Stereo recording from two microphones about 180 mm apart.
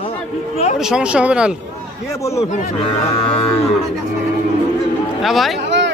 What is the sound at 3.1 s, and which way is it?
Speech, 30° left (ahead or behind).